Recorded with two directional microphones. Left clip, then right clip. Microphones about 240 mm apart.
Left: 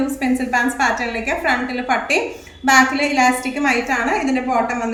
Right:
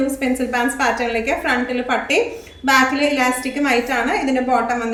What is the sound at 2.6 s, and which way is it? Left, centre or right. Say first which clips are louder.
A woman's voice: left 1 dB; left.